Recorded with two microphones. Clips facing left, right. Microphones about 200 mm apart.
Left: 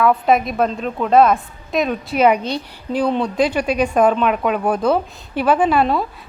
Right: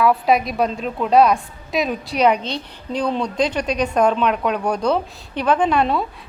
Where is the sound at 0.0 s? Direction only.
Centre (ahead or behind).